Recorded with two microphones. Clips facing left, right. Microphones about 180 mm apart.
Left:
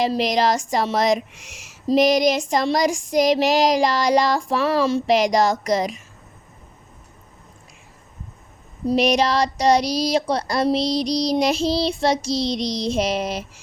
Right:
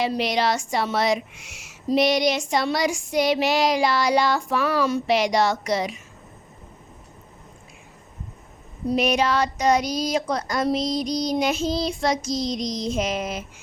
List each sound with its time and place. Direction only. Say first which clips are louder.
0.2 s child singing: left 3 dB; 40° left (ahead or behind)
5.1 s speech: left 3 dB; 40° left (ahead or behind)
9.0 s child singing: left 3 dB; 35° left (ahead or behind)
10.8 s music: left 3 dB; 80° left
11.3 s child singing: left 3 dB; 35° left (ahead or behind)
12.3 s child singing: left 3 dB; 75° left (ahead or behind)
13.0 s child singing: left 5 dB; 35° left (ahead or behind)